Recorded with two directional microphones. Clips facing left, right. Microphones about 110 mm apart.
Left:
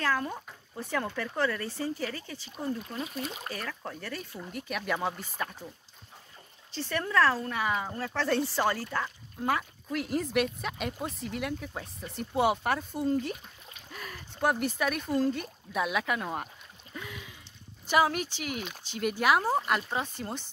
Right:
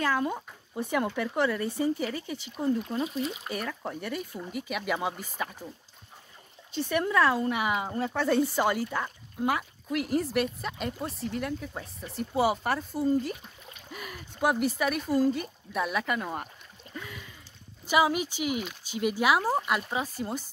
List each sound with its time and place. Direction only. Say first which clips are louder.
0.0 s speech: right 3 dB; 15° right (ahead or behind)
6.8 s speech: right 2 dB; 15° right (ahead or behind)
16.9 s a sound: even; centre (ahead or behind)
17.8 s speech: right 1 dB; 5° right (ahead or behind)